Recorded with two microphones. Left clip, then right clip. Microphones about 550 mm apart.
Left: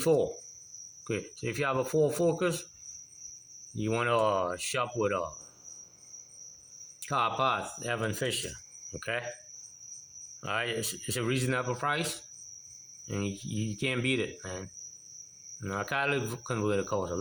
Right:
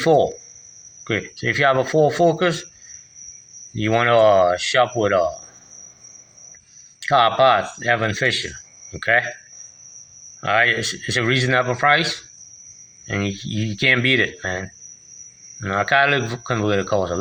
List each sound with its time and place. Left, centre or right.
0.0 s speech: left
3.8 s speech: left
7.1 s speech: left
10.4 s speech: left